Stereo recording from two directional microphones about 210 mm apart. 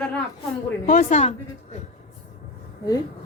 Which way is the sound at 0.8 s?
35° left (ahead or behind).